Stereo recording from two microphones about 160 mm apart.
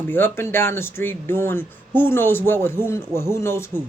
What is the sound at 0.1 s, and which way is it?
A man's voice, 15° left (ahead or behind).